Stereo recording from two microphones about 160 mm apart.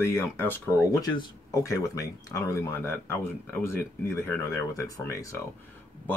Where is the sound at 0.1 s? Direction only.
15° left (ahead or behind).